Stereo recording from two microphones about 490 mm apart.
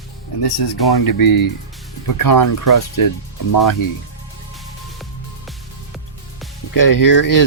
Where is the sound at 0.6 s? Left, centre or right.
Left.